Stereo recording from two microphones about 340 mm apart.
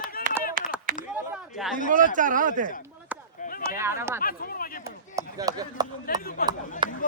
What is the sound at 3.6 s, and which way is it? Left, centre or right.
Speech, centre.